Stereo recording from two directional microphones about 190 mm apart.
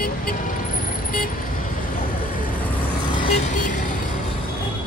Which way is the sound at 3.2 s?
35° left (ahead or behind).